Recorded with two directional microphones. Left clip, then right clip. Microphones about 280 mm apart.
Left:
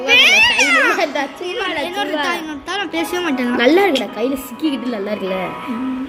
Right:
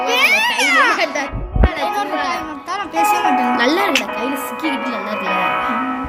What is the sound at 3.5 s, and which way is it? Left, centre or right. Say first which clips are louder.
Speech: left 3 dB; centre.